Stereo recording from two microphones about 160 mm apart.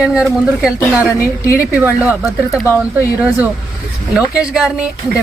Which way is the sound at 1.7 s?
15° right (ahead or behind).